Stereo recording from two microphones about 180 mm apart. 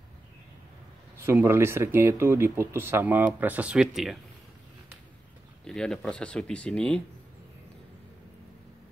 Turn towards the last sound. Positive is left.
turn(degrees=5)  # may be behind; listen again after turning